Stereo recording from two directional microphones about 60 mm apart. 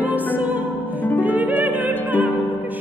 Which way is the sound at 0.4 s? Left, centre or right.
Right.